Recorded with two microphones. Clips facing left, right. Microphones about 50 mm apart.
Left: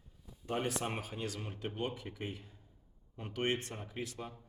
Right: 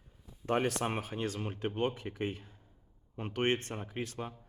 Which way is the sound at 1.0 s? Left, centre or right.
Right.